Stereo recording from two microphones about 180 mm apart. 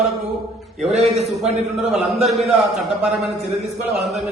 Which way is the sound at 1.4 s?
40° right (ahead or behind).